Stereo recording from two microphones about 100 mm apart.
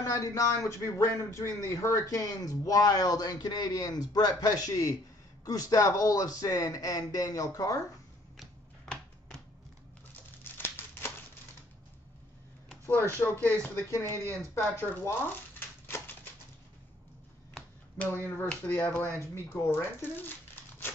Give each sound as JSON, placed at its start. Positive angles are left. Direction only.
{"t": 0.0, "sound": "speech", "side_deg": 35}
{"t": 10.4, "sound": "crumpling", "side_deg": 20}
{"t": 12.8, "sound": "speech", "side_deg": 20}
{"t": 13.9, "sound": "speech", "side_deg": 30}
{"t": 14.8, "sound": "speech", "side_deg": 20}
{"t": 18.5, "sound": "speech", "side_deg": 15}